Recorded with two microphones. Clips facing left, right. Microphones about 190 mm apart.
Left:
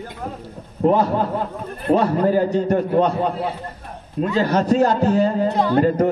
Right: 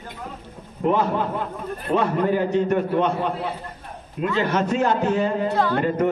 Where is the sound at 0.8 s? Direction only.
35° left (ahead or behind).